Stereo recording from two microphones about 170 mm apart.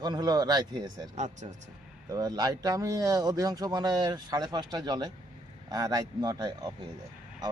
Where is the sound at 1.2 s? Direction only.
45° right (ahead or behind).